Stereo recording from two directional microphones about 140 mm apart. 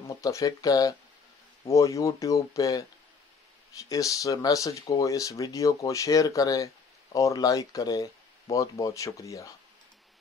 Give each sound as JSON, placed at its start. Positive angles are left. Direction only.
{"t": 0.2, "sound": "speech", "side_deg": 25}
{"t": 3.9, "sound": "speech", "side_deg": 25}